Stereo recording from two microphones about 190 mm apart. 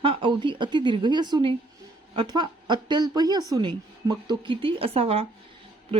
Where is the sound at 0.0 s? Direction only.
25° right (ahead or behind).